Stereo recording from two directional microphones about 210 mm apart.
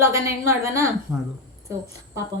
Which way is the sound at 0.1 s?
40° right (ahead or behind).